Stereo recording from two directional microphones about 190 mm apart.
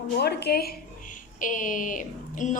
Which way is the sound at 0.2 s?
60° left (ahead or behind).